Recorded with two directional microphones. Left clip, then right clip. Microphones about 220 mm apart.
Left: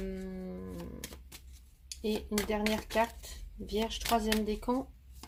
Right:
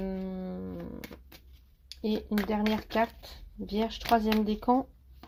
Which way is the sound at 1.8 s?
30° right (ahead or behind).